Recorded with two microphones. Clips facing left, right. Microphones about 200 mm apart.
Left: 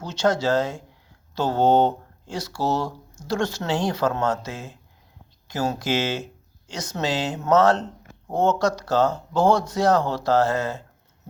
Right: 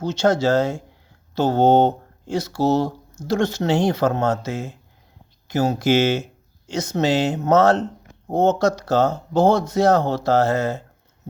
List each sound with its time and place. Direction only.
0.0 s a man's voice: 25° right (ahead or behind)